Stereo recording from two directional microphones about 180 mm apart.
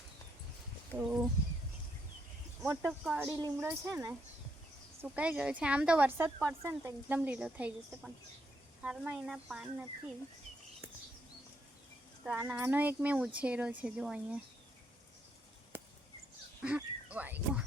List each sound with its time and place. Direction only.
0.9 s speech: 5° right (ahead or behind)
2.6 s speech: 15° right (ahead or behind)
12.2 s speech: 10° right (ahead or behind)
16.6 s speech: 5° right (ahead or behind)